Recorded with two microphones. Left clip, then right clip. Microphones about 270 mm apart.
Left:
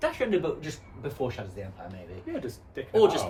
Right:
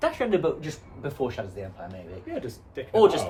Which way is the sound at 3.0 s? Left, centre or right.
Centre.